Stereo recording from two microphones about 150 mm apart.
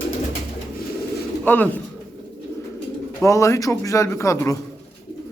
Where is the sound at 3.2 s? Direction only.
20° left (ahead or behind).